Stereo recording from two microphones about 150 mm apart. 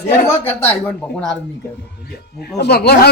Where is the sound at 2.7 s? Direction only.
90° left.